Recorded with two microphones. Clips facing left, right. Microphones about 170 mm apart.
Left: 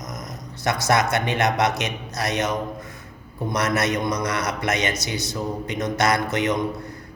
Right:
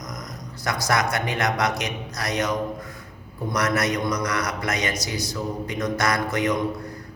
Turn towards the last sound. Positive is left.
turn(degrees=25)  # may be behind; listen again after turning